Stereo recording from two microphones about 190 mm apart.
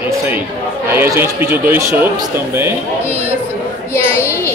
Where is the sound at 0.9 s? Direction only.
10° right (ahead or behind).